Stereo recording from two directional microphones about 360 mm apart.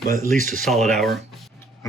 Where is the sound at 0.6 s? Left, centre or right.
Centre.